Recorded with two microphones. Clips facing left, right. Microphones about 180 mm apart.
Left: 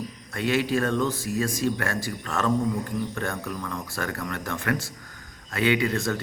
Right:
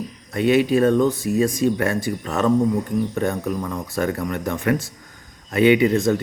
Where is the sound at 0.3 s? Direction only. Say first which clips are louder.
Right 8 dB; 20° right (ahead or behind).